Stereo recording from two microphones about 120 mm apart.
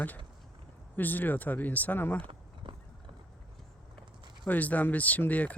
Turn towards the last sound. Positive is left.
turn(degrees=10)  # may be behind; listen again after turning